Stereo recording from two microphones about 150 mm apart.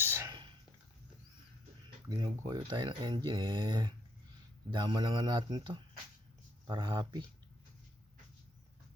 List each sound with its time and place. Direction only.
0.0 s whispering: 15° right (ahead or behind)
2.0 s speech: 30° right (ahead or behind)